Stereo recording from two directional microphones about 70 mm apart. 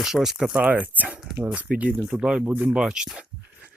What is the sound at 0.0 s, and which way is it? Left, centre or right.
Speech, centre.